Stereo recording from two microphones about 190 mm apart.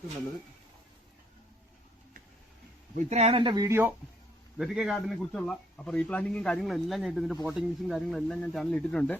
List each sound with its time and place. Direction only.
2.9 s speech: 35° right (ahead or behind); by 3.9 s 10° right (ahead or behind)
4.5 s a man's voice: centre (ahead or behind)